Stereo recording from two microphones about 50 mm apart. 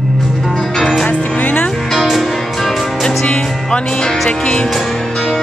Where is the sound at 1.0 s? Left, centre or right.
Left.